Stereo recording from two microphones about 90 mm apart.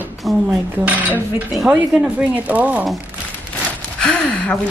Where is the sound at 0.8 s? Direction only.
20° right (ahead or behind).